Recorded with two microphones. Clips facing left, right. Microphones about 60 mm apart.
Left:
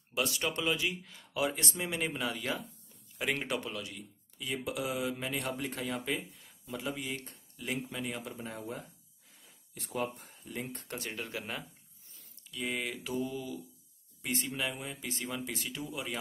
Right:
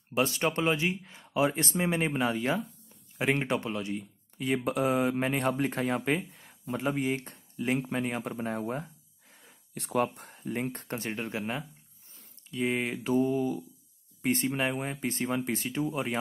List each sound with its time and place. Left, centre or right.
0.1 s speech: right
4.4 s speech: right
9.8 s speech: right